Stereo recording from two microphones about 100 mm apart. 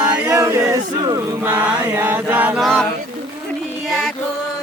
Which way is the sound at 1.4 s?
20° right (ahead or behind).